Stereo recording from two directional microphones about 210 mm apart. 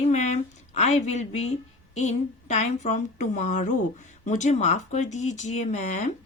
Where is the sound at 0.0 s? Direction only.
30° left (ahead or behind).